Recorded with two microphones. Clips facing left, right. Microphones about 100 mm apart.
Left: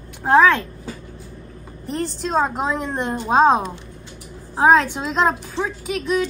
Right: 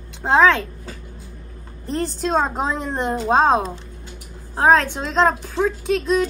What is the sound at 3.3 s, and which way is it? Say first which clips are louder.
A woman's voice: left 2 dB; 10° left (ahead or behind).